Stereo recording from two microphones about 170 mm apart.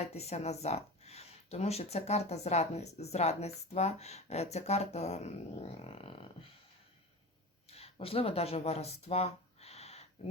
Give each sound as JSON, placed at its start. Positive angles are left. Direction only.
{"t": 0.0, "sound": "speech", "side_deg": 40}
{"t": 7.8, "sound": "speech", "side_deg": 35}